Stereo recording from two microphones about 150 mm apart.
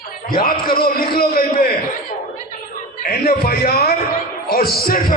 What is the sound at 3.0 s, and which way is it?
A man's voice, 90° left.